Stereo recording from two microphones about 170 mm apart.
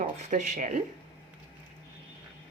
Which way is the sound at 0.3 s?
45° right (ahead or behind).